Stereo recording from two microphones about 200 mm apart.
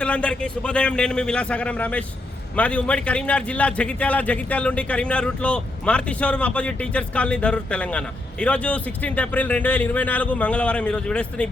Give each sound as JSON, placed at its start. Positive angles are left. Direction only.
{"t": 0.0, "sound": "a man's voice", "side_deg": 5}